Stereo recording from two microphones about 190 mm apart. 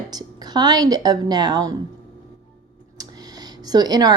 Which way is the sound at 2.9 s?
20° right (ahead or behind).